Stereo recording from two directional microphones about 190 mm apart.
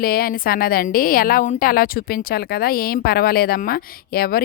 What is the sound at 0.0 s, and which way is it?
A woman's voice, 50° left (ahead or behind).